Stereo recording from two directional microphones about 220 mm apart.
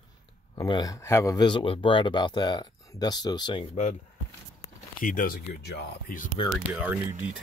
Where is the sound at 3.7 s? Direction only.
35° left (ahead or behind).